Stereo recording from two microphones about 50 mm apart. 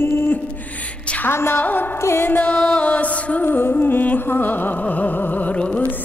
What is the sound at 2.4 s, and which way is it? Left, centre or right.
Music, left.